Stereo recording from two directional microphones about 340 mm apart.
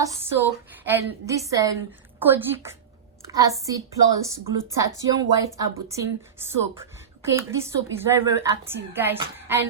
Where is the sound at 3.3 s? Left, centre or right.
Centre.